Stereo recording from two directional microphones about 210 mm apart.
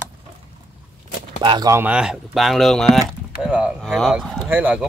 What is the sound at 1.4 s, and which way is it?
Speech, 20° right (ahead or behind).